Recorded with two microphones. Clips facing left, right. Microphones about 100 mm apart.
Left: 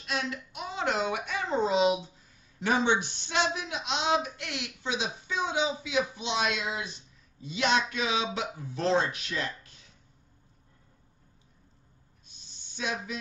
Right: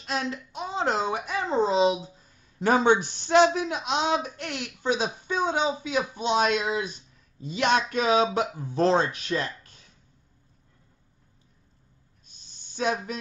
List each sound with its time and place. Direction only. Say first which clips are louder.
0.0 s a child's voice: right 3 dB; 35° right (ahead or behind)
2.6 s speech: right 5 dB; 45° right (ahead or behind)
12.5 s a sound: right 7 dB; 45° right (ahead or behind)